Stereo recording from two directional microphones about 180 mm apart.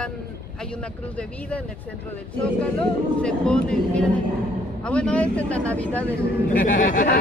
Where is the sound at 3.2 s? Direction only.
5° left (ahead or behind).